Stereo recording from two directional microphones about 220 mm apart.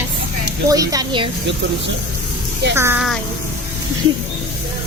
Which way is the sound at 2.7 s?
10° right (ahead or behind).